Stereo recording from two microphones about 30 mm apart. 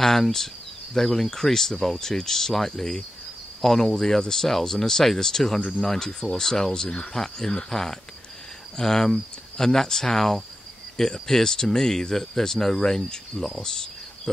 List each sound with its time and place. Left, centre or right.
0.0 s speech: centre
6.7 s speech: left
7.2 s speech: centre